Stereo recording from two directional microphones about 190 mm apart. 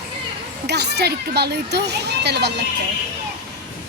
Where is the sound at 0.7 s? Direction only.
60° right (ahead or behind).